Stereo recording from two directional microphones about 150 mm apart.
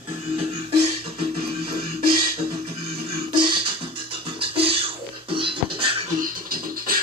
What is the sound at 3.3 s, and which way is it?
Music, 35° right (ahead or behind).